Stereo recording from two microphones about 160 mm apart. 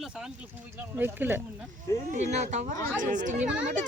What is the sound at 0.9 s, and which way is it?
Speech, 10° right (ahead or behind).